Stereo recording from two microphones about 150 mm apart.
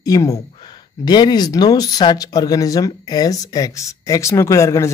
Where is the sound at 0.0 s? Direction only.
20° left (ahead or behind).